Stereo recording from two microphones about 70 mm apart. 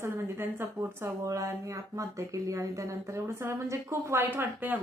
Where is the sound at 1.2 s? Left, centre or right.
Right.